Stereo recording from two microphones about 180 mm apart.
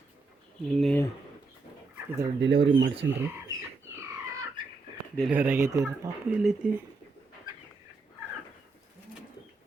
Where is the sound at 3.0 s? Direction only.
80° right.